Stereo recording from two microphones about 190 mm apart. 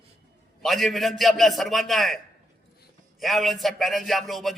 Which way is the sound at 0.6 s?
Centre (ahead or behind).